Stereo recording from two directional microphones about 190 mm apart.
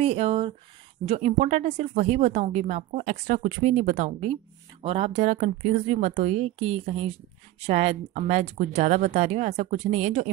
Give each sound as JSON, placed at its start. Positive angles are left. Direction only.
{"t": 0.0, "sound": "speech", "side_deg": -30}